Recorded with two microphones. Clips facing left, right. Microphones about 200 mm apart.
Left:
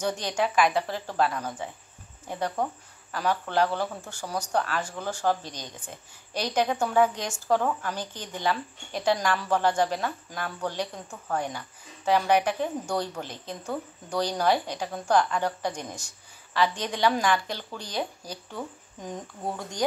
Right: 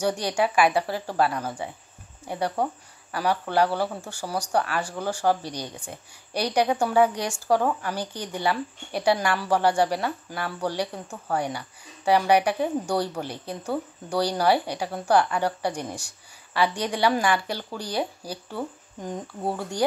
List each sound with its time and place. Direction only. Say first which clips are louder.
0.0 s speech: right 3 dB; 10° right (ahead or behind)